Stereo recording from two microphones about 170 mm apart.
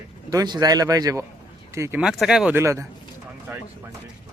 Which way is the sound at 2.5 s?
15° right (ahead or behind).